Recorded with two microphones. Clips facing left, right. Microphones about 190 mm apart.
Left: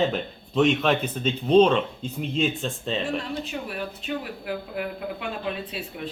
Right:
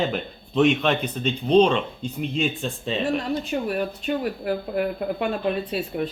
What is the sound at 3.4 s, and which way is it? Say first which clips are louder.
Speech: right 7 dB; 45° right (ahead or behind).